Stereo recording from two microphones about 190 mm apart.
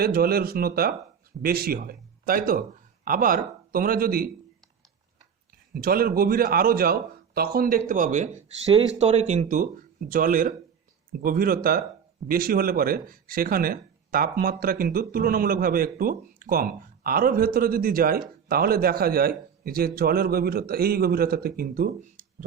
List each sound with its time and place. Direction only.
0.0 s speech: 50° right (ahead or behind)
5.7 s speech: 50° right (ahead or behind)